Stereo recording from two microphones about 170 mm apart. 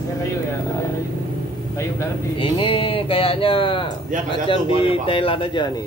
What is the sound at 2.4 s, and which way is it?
Speech, 30° left (ahead or behind).